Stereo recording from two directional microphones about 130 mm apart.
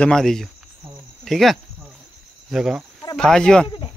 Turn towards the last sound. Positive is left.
turn(degrees=5)  # may be behind; listen again after turning